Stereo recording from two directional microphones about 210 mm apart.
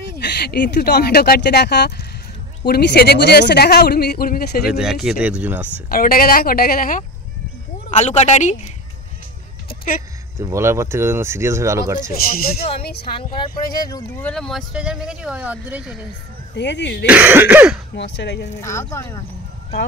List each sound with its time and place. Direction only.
0.2 s speech: 50° left (ahead or behind)
4.6 s speech: centre (ahead or behind)
5.9 s speech: 45° left (ahead or behind)
9.7 s a sound: 45° left (ahead or behind)
10.4 s speech: 15° right (ahead or behind)
12.1 s speech: 45° left (ahead or behind)
13.0 s speech: 25° left (ahead or behind)
14.2 s speech: 5° left (ahead or behind)
16.5 s speech: 55° left (ahead or behind)
17.1 s speech: 10° right (ahead or behind)
17.9 s speech: 55° left (ahead or behind)
18.6 s speech: 15° left (ahead or behind)